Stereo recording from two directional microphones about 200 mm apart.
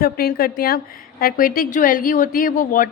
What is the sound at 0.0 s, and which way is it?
A woman's voice, 50° left (ahead or behind).